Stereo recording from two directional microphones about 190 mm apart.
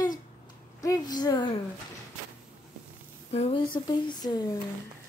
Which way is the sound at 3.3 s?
30° left (ahead or behind).